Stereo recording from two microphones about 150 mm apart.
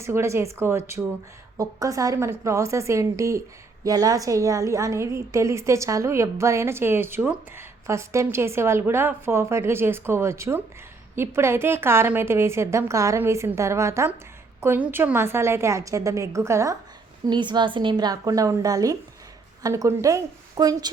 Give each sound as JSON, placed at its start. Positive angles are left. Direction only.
{"t": 0.0, "sound": "a woman's voice", "side_deg": -20}
{"t": 17.2, "sound": "a woman's voice", "side_deg": -30}